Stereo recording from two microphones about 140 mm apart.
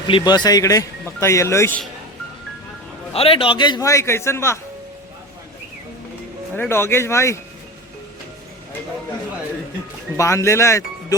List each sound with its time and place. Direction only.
0.1 s speech: 30° left (ahead or behind)
3.1 s speech: 45° left (ahead or behind); by 4.6 s 20° left (ahead or behind)
6.5 s speech: 15° left (ahead or behind)
10.2 s speech: 20° left (ahead or behind)